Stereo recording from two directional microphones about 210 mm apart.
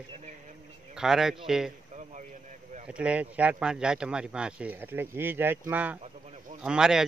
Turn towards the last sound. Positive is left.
turn(degrees=-5)  # may be behind; listen again after turning